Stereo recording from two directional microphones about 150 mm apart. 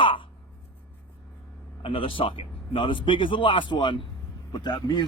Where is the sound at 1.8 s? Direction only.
35° left (ahead or behind).